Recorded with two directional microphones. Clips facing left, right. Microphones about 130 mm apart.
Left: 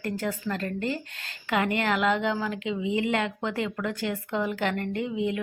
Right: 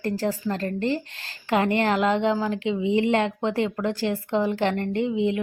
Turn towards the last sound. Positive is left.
turn(degrees=-25)  # may be behind; listen again after turning